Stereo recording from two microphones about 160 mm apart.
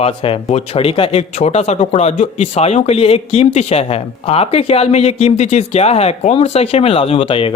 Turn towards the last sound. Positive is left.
turn(degrees=35)  # may be behind; listen again after turning